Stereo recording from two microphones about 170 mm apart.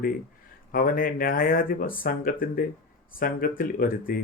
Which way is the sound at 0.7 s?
55° left (ahead or behind).